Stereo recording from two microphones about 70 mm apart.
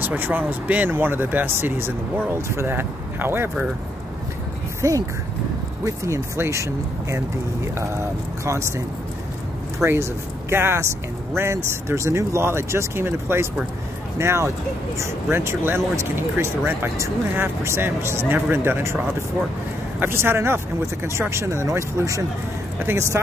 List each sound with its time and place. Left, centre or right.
0.0 s speech: right
4.8 s speech: right
5.9 s speech: right
8.5 s speech: right
10.5 s speech: right
20.0 s speech: right